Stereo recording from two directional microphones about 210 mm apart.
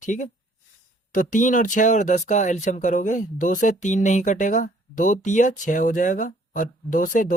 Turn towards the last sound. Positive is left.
turn(degrees=40)  # may be behind; listen again after turning